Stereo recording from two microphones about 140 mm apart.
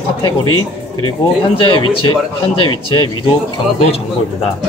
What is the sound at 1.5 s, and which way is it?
Speech, 35° left (ahead or behind).